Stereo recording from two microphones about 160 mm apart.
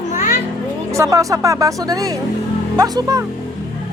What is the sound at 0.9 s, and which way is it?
Speech, 20° right (ahead or behind).